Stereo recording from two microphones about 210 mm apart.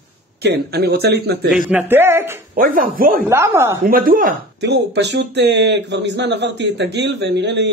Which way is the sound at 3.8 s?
45° right (ahead or behind).